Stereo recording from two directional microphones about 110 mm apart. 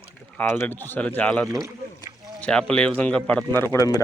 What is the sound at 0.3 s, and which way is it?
Speech, 20° left (ahead or behind).